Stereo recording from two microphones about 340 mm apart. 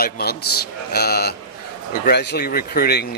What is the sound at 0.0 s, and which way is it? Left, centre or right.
Speech, left.